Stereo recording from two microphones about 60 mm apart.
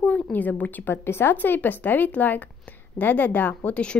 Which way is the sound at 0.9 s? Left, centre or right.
Left.